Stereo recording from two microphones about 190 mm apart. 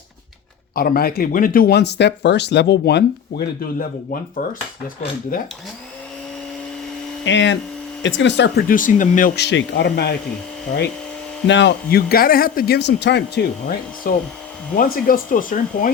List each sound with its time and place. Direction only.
0.8 s speech: 50° left (ahead or behind)
7.3 s speech: 75° left (ahead or behind)
11.4 s speech: 70° left (ahead or behind); by 15.9 s 45° left (ahead or behind)